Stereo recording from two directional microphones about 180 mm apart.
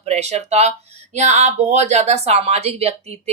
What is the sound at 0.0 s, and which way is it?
Speech, 35° right (ahead or behind).